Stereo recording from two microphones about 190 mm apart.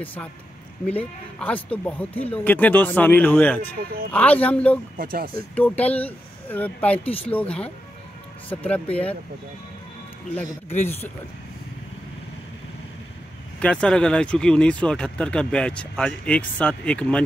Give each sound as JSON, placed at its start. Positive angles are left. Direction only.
{"t": 0.0, "sound": "speech", "side_deg": 10}
{"t": 4.9, "sound": "speech", "side_deg": -50}
{"t": 5.3, "sound": "speech", "side_deg": 5}
{"t": 13.6, "sound": "speech", "side_deg": 5}